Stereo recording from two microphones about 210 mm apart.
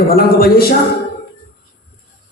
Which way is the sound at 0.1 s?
45° left (ahead or behind).